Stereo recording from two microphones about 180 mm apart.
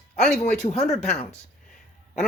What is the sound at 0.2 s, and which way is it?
Speech, 5° left (ahead or behind).